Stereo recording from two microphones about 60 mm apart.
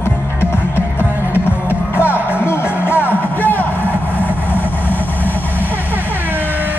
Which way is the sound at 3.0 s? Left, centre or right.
Right.